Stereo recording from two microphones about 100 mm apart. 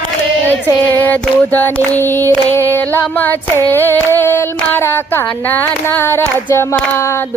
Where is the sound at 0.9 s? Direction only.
20° left (ahead or behind).